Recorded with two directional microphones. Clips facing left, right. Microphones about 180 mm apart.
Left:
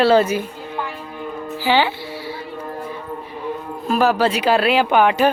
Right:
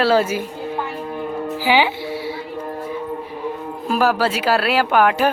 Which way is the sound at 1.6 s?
10° right (ahead or behind).